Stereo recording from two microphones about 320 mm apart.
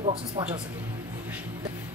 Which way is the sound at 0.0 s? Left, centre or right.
Centre.